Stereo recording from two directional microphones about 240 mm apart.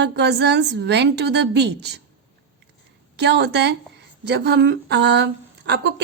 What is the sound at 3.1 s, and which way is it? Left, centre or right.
Speech, right.